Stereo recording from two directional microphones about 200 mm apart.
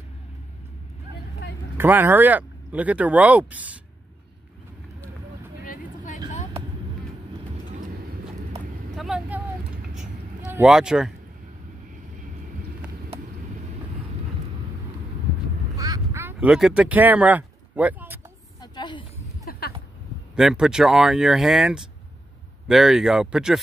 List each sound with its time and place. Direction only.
1.8 s speech: 10° right (ahead or behind)
5.7 s vehicle: 40° left (ahead or behind)
8.9 s vehicle: centre (ahead or behind)
15.7 s quack: 20° right (ahead or behind)
18.6 s a sound: 20° left (ahead or behind)
19.5 s a sound: 45° left (ahead or behind)
20.3 s speech: 5° right (ahead or behind)